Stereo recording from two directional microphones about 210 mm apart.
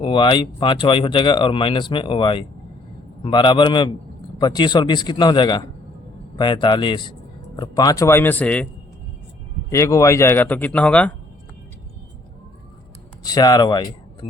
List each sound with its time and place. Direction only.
0.0 s speech: 20° left (ahead or behind); by 8.6 s 5° left (ahead or behind)
9.6 s speech: 15° left (ahead or behind)
13.2 s speech: 20° left (ahead or behind)